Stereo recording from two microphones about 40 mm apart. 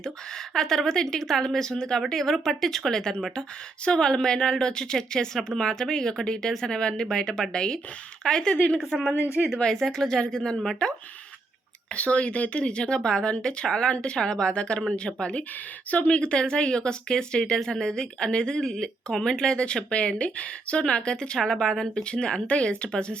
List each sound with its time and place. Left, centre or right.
0.0 s a woman's voice: centre
8.9 s speech: centre
9.6 s a woman's voice: centre
11.9 s a woman's voice: left